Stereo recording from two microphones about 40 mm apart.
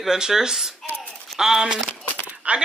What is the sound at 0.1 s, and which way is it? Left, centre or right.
Speech, centre.